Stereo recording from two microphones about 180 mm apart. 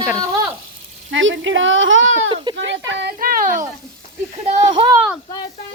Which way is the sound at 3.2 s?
50° right (ahead or behind).